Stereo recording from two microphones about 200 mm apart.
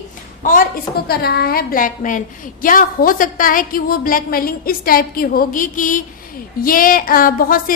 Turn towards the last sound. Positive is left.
turn(degrees=45)  # may be behind; listen again after turning